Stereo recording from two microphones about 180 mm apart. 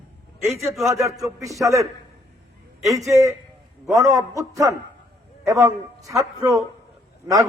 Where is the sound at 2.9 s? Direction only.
20° right (ahead or behind).